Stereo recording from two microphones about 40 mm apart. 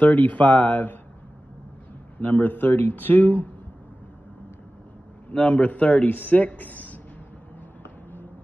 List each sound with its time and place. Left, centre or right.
0.0 s speech: left
2.1 s speech: left
5.3 s speech: left